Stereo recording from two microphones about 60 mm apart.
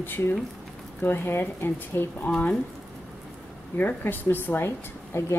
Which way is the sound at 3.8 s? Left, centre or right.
Left.